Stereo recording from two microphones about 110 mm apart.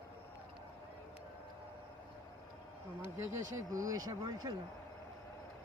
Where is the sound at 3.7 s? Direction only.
30° right (ahead or behind).